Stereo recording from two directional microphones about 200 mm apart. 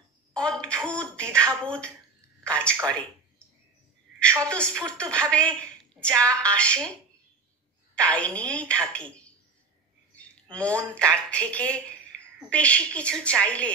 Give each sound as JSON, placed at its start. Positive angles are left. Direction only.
{"t": 0.3, "sound": "a sound", "side_deg": 5}
{"t": 1.5, "sound": "a woman's voice", "side_deg": 5}
{"t": 4.5, "sound": "a woman's voice", "side_deg": 5}
{"t": 6.0, "sound": "a woman's voice", "side_deg": -15}
{"t": 6.3, "sound": "a woman's voice", "side_deg": 5}
{"t": 7.9, "sound": "a woman's voice", "side_deg": 5}